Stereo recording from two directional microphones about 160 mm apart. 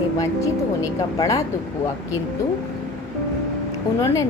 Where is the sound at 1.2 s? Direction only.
20° left (ahead or behind).